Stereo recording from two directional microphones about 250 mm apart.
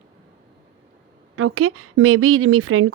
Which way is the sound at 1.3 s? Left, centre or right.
Right.